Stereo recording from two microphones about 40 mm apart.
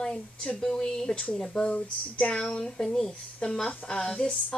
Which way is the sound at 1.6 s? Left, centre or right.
Left.